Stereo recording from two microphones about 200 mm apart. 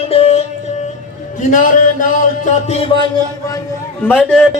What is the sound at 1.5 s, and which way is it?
Speech, 40° left (ahead or behind).